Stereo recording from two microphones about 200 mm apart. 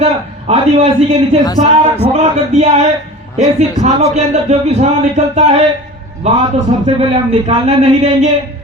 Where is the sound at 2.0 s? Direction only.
35° right (ahead or behind).